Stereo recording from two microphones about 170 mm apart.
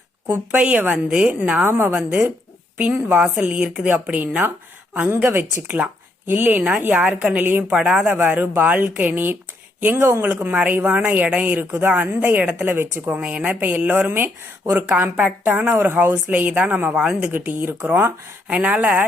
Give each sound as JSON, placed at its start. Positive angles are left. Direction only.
{"t": 0.3, "sound": "a woman's voice", "side_deg": -5}